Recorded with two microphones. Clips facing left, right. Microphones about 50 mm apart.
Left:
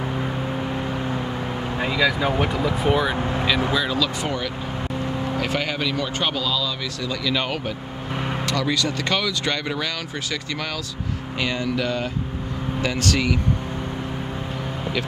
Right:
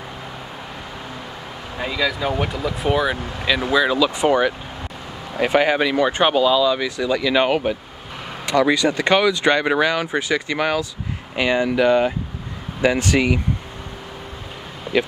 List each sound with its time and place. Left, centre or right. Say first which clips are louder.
1.8 s speech: left 1 dB; centre
3.2 s speech: left 5 dB; left
3.7 s speech: right 5 dB; centre
4.2 s speech: right 9 dB; right
14.9 s vehicle: right 7 dB; centre